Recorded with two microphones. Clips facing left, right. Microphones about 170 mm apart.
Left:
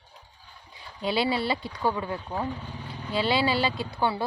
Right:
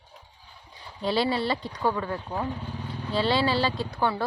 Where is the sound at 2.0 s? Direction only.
15° left (ahead or behind).